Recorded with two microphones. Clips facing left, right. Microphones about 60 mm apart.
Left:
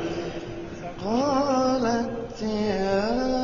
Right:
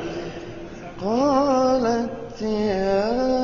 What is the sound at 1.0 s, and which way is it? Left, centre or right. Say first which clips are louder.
Mantra: right 4 dB; right.